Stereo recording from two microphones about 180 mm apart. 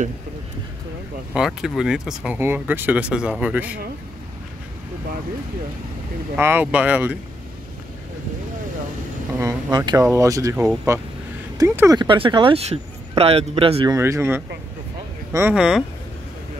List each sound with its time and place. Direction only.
1.3 s speech: 5° right (ahead or behind)
6.3 s speech: 10° right (ahead or behind)
9.4 s speech: 20° right (ahead or behind)
13.9 s speech: 15° right (ahead or behind)